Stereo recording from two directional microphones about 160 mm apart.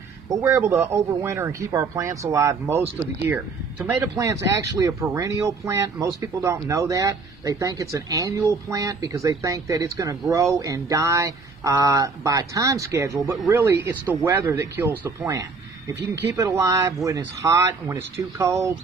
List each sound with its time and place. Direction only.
0.3 s speech: 15° right (ahead or behind)